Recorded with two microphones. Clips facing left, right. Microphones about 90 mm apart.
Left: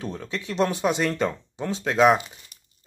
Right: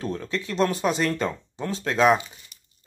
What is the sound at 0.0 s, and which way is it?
Speech, 5° left (ahead or behind).